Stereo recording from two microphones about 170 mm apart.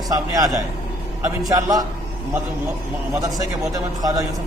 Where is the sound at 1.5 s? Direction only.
20° right (ahead or behind).